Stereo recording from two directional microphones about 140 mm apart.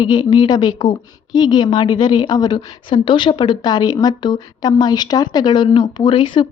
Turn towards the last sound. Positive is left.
turn(degrees=35)  # may be behind; listen again after turning